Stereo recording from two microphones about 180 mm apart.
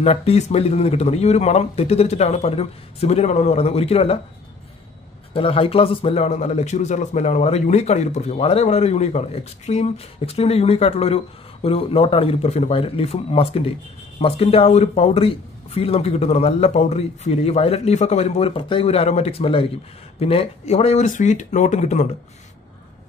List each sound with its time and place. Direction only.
0.0 s a man's voice: 35° left (ahead or behind)
5.3 s a man's voice: 30° left (ahead or behind)